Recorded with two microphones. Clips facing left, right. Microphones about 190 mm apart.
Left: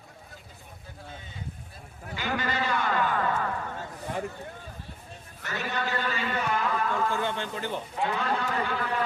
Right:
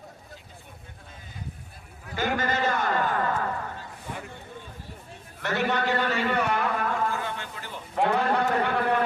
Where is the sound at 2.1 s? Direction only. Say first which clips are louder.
Right 4 dB; 45° right (ahead or behind).